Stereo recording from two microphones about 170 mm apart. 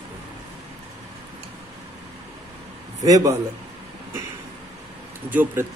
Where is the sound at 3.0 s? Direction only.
20° right (ahead or behind).